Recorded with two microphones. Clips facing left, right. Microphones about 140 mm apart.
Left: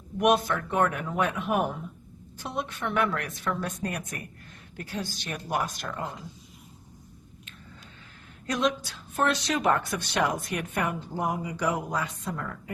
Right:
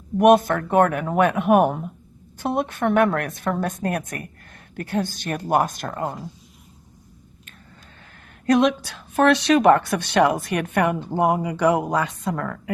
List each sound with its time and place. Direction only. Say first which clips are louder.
0.2 s a woman's voice: right 8 dB; 50° right (ahead or behind)
8.4 s a woman's voice: right 9 dB; 70° right (ahead or behind)